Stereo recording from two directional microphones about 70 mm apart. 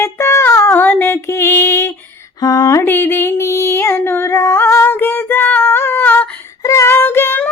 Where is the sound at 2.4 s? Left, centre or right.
Left.